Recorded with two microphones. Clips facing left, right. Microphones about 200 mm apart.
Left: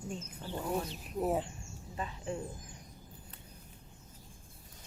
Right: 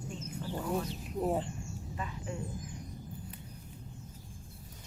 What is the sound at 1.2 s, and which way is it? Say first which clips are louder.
Speech: even; centre (ahead or behind).